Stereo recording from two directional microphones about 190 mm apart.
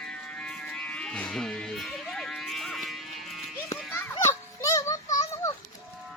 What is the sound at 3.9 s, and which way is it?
Children playing, 10° left (ahead or behind).